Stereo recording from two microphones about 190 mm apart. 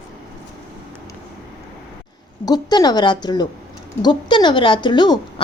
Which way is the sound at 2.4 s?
20° left (ahead or behind).